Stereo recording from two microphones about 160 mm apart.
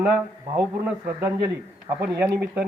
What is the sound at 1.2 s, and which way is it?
A man's voice, 20° right (ahead or behind).